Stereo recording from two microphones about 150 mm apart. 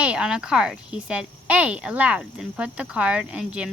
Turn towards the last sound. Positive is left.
turn(degrees=-5)  # may be behind; listen again after turning